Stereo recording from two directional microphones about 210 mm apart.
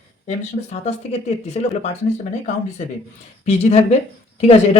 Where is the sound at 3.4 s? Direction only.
30° left (ahead or behind).